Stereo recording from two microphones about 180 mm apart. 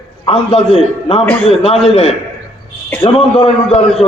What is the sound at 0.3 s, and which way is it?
A man's voice, 35° left (ahead or behind).